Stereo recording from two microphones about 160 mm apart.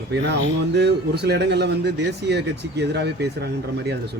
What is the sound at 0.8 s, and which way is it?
Speech, 90° right.